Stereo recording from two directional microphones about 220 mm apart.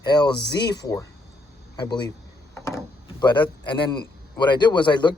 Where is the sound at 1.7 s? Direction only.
20° left (ahead or behind).